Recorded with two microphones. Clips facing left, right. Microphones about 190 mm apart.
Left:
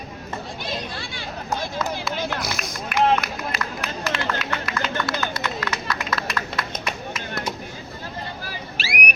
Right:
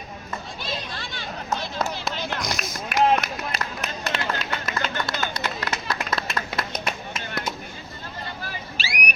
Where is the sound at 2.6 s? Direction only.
Centre (ahead or behind).